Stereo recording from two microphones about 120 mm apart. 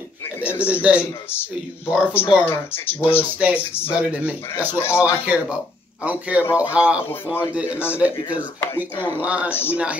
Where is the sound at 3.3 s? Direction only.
10° right (ahead or behind).